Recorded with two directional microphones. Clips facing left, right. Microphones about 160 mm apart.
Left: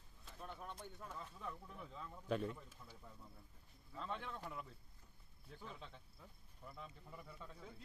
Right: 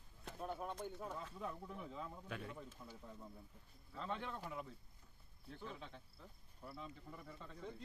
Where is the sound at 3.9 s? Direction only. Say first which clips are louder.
Right 2 dB; centre (ahead or behind).